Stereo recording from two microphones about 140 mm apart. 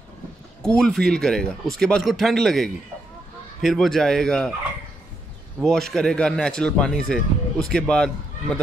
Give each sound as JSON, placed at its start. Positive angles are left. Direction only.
{"t": 0.6, "sound": "speech", "side_deg": 5}
{"t": 5.6, "sound": "speech", "side_deg": 0}